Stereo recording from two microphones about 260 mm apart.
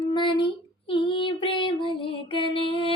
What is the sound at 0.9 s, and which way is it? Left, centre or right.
Music, centre.